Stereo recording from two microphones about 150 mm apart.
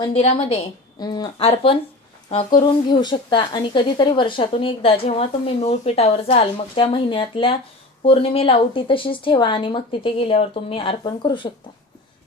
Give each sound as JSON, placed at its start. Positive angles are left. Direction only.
{"t": 0.1, "sound": "a woman's voice", "side_deg": 45}
{"t": 0.9, "sound": "a woman's voice", "side_deg": 25}
{"t": 1.4, "sound": "speech", "side_deg": 40}